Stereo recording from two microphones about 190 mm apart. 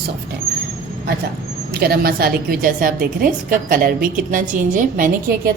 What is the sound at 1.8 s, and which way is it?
A woman's voice, 55° right (ahead or behind).